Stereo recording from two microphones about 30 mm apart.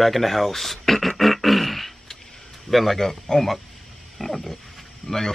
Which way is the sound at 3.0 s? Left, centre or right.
Centre.